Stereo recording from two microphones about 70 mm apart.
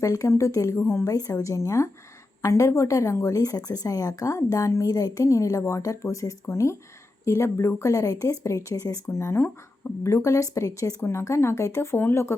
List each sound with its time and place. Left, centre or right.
0.0 s a woman's voice: left
1.0 s a woman's voice: left
4.9 s a woman's voice: left
9.0 s a woman's voice: left